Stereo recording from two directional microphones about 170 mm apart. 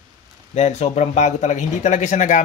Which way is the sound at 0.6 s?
40° left (ahead or behind).